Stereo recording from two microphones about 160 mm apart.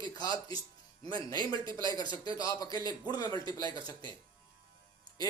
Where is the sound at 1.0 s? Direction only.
25° left (ahead or behind).